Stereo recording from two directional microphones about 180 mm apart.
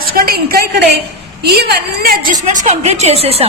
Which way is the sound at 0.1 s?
55° right (ahead or behind).